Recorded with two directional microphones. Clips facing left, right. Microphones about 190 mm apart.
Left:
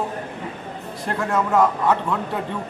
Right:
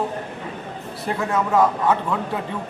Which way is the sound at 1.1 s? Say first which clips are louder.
Even; centre (ahead or behind).